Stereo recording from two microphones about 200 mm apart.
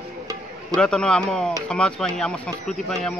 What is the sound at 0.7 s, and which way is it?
Speech, 5° left (ahead or behind).